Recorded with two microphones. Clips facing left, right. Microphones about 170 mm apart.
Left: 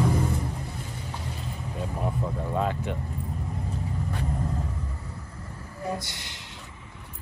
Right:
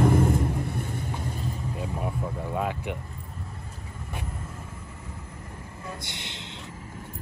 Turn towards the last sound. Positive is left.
turn(degrees=-20)  # may be behind; listen again after turning